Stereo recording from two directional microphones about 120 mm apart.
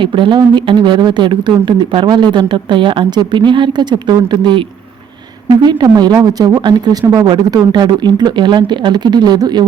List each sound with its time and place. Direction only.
0.0 s speech: 45° right (ahead or behind)